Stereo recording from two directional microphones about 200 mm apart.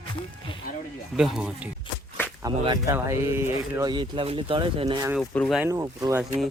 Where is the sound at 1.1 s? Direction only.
5° right (ahead or behind).